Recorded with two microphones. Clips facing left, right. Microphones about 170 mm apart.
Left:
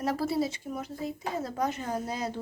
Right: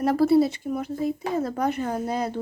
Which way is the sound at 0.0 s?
60° right (ahead or behind).